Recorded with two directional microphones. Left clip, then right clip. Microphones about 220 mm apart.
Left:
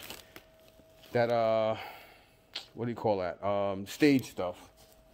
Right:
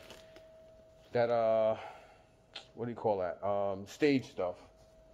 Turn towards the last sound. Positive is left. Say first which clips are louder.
# left 3 dB
turn(degrees=40)  # may be behind; listen again after turning